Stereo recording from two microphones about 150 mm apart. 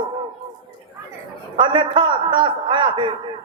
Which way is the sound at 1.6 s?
35° right (ahead or behind).